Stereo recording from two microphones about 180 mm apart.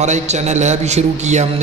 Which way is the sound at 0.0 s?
40° right (ahead or behind).